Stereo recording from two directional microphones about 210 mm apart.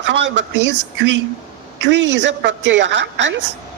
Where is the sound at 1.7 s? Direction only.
55° right (ahead or behind).